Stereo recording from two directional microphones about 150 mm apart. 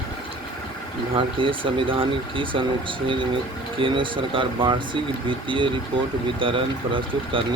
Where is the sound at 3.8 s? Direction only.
35° right (ahead or behind).